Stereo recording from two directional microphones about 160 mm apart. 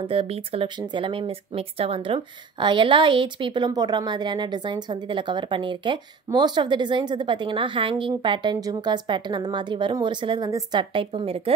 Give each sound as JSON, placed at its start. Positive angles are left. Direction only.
{"t": 0.0, "sound": "speech", "side_deg": -35}